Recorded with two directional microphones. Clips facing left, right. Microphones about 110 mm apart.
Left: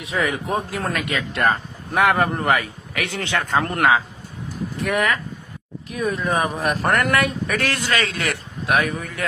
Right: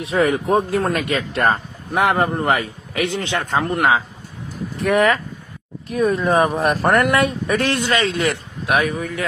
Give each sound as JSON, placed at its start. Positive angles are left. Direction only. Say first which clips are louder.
{"t": 0.0, "sound": "a man's voice", "louder": "right 6 dB", "side_deg": -30}
{"t": 3.6, "sound": "speech", "louder": "right 1 dB", "side_deg": -10}
{"t": 4.8, "sound": "a man's voice", "louder": "right 6 dB", "side_deg": -30}